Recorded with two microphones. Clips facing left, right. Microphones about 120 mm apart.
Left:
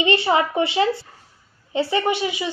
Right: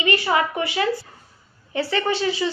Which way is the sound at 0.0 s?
25° left (ahead or behind).